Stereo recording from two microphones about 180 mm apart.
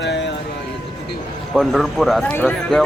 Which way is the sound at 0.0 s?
80° left.